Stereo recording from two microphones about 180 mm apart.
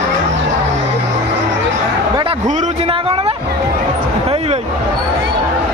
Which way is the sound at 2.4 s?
35° right (ahead or behind).